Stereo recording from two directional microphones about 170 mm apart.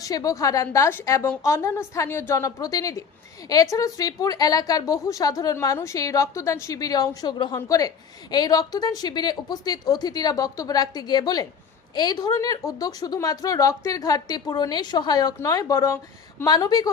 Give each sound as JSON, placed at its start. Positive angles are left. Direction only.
{"t": 0.0, "sound": "a woman's voice", "side_deg": 20}